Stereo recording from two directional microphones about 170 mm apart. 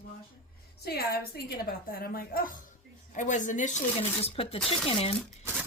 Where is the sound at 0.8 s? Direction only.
65° left (ahead or behind).